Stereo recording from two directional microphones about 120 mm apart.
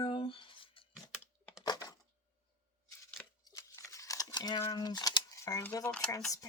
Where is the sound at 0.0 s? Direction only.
45° left (ahead or behind).